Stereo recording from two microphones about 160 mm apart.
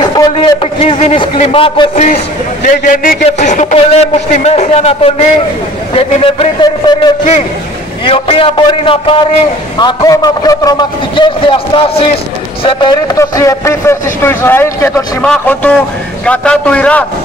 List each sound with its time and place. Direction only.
0.0 s a sound: 25° left (ahead or behind)
1.3 s a man's voice: 35° left (ahead or behind)
2.6 s a man's voice: 60° left (ahead or behind)
3.3 s a man's voice: 45° left (ahead or behind); by 17.0 s 10° left (ahead or behind)